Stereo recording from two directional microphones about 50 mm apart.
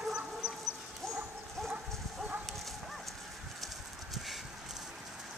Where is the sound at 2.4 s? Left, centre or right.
Centre.